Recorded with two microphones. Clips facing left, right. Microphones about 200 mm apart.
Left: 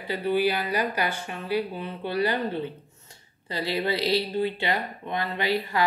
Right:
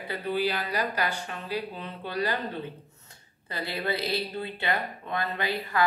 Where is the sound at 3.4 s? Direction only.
25° left (ahead or behind).